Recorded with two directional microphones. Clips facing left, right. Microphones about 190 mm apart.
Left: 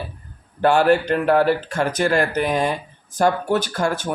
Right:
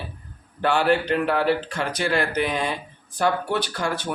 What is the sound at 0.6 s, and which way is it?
Speech, 45° left (ahead or behind).